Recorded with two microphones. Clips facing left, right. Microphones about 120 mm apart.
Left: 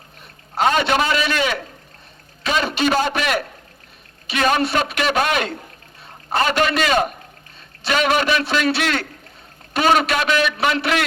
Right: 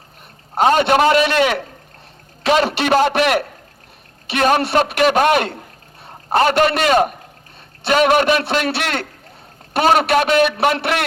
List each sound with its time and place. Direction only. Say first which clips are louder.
0.7 s a man's voice: right 7 dB; 50° right (ahead or behind)
4.3 s a man's voice: right 3 dB; 50° right (ahead or behind)